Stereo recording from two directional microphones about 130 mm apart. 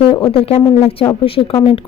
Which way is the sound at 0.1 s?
45° left (ahead or behind).